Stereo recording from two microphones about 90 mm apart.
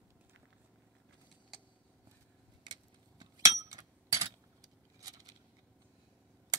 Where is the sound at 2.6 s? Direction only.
55° right (ahead or behind).